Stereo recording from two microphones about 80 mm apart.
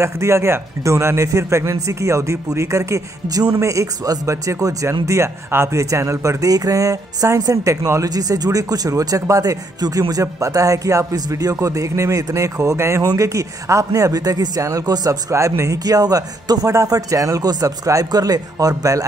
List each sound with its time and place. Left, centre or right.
0.0 s a man's voice: right
8.1 s a man's voice: right
13.0 s speech: right